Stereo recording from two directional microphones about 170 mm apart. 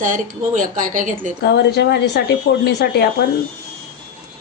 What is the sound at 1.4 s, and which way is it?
Speech, 80° left.